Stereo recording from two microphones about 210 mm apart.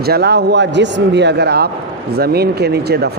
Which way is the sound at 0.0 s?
50° right (ahead or behind).